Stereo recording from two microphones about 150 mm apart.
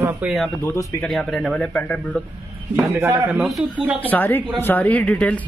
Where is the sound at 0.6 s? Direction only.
15° left (ahead or behind).